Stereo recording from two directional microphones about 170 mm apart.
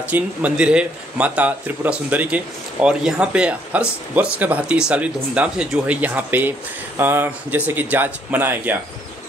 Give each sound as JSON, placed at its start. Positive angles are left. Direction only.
{"t": 0.1, "sound": "speech", "side_deg": -5}